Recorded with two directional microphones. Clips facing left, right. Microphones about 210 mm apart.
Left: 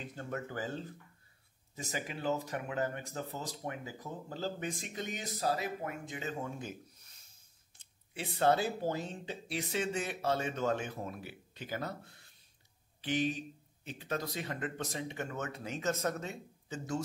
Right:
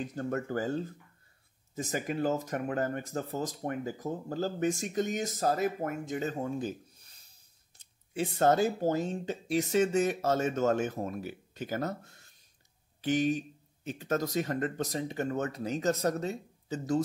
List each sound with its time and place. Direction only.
0.0 s speech: 40° right (ahead or behind)
1.9 s speech: 45° right (ahead or behind)